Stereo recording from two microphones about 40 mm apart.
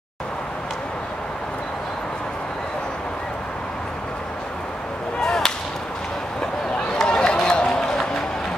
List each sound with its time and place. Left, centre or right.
5.2 s whip: centre
6.4 s run: left